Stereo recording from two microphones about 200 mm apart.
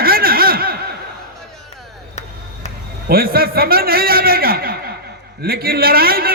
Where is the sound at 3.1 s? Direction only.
50° right (ahead or behind).